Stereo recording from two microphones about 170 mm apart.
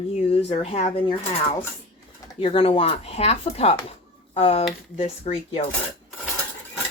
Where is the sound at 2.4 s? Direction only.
35° left (ahead or behind).